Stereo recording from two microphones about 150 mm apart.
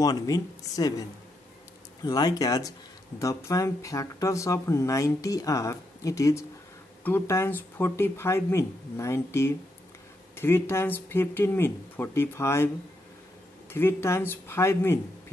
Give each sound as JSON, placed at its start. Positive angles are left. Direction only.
{"t": 0.0, "sound": "speech", "side_deg": 25}
{"t": 2.0, "sound": "speech", "side_deg": 25}
{"t": 13.7, "sound": "speech", "side_deg": 15}